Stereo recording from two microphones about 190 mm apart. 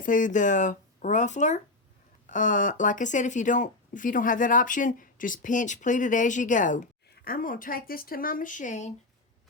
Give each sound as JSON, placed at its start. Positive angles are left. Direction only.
{"t": 0.0, "sound": "speech", "side_deg": 45}